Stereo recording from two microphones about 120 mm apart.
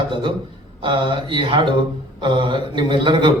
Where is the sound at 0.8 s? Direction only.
45° right (ahead or behind).